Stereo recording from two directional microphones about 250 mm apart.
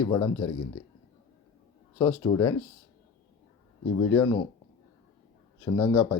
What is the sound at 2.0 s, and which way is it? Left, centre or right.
Speech, centre.